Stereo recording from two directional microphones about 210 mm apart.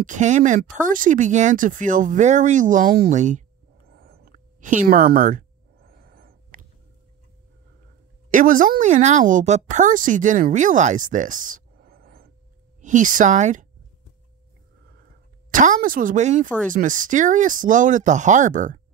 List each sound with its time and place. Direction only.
0.0 s a woman's voice: 35° right (ahead or behind)
0.7 s a sound: 40° right (ahead or behind)
8.3 s a woman's voice: 40° right (ahead or behind)
15.5 s a woman's voice: 40° right (ahead or behind)